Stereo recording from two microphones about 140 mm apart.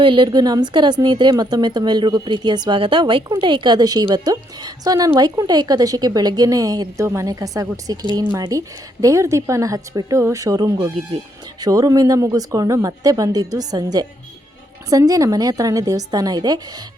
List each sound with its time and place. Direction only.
0.0 s speech: 35° right (ahead or behind)